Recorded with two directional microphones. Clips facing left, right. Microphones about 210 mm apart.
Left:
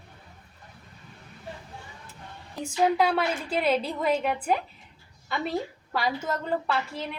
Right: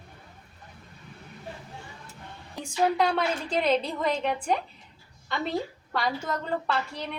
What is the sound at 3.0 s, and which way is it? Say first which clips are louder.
A woman's voice: left 1 dB; 5° left (ahead or behind).